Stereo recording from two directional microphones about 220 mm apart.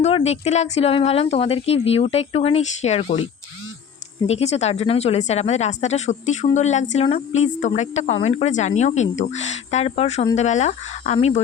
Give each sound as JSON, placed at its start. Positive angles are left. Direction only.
{"t": 0.0, "sound": "speech", "side_deg": 30}
{"t": 4.3, "sound": "speech", "side_deg": 30}